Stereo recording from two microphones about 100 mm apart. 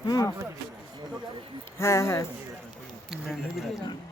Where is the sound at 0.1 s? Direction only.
35° left (ahead or behind).